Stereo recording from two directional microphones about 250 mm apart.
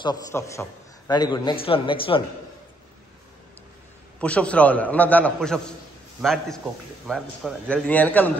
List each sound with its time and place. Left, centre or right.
0.0 s a man's voice: centre
4.2 s a man's voice: centre